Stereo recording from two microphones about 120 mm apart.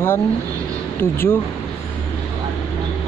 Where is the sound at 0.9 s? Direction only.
20° left (ahead or behind).